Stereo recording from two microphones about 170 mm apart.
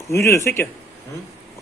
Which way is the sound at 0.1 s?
15° left (ahead or behind).